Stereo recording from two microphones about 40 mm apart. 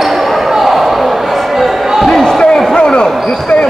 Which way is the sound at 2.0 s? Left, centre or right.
Centre.